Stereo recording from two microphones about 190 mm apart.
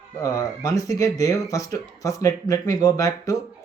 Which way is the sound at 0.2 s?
15° left (ahead or behind).